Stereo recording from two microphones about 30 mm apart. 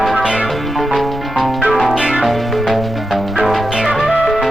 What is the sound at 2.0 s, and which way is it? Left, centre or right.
Music, right.